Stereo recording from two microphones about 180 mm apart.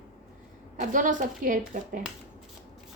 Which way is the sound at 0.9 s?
45° right (ahead or behind).